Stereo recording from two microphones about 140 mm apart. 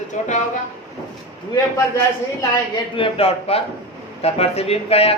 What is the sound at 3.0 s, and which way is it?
A man's voice, 45° left (ahead or behind).